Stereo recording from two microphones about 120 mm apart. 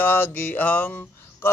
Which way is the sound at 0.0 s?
15° left (ahead or behind).